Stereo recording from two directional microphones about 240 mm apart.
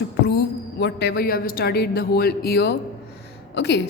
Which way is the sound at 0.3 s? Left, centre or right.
Left.